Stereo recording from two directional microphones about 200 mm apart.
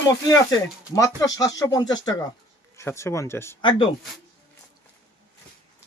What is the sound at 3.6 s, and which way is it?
Speech, 25° left (ahead or behind).